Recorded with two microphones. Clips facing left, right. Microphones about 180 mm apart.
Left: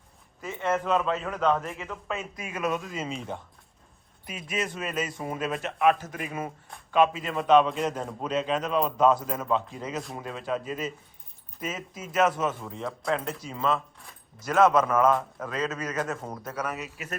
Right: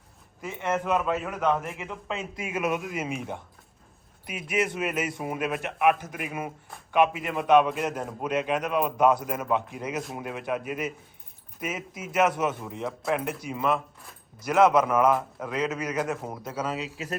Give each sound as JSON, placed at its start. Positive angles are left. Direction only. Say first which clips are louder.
{"t": 0.4, "sound": "a man's voice", "louder": "even", "side_deg": -15}
{"t": 4.3, "sound": "speech", "louder": "right 4 dB", "side_deg": -65}
{"t": 4.6, "sound": "a man's voice", "louder": "right 5 dB", "side_deg": -15}
{"t": 5.2, "sound": "a man's voice", "louder": "right 1 dB", "side_deg": -5}
{"t": 10.0, "sound": "speech", "louder": "right 2 dB", "side_deg": 0}
{"t": 10.2, "sound": "a man's voice", "louder": "left 1 dB", "side_deg": -15}
{"t": 13.5, "sound": "a man's voice", "louder": "even", "side_deg": -15}
{"t": 16.4, "sound": "speech", "louder": "right 2 dB", "side_deg": -20}